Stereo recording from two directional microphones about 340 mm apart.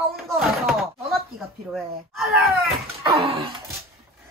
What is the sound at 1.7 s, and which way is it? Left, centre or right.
Speech, centre.